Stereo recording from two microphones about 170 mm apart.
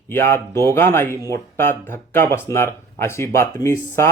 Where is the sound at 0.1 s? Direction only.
15° left (ahead or behind).